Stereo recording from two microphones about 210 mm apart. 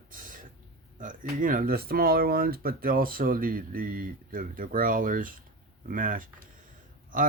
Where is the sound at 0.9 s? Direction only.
40° right (ahead or behind).